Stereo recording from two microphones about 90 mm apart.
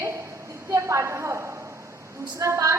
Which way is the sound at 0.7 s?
35° right (ahead or behind).